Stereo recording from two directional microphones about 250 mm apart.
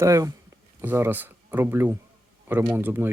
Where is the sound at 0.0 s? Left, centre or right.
Centre.